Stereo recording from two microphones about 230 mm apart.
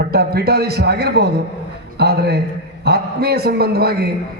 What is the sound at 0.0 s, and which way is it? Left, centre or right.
A man's voice, right.